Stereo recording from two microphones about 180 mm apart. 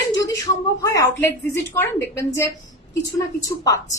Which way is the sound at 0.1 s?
20° left (ahead or behind).